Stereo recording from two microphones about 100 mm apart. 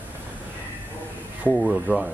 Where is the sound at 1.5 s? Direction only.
5° right (ahead or behind).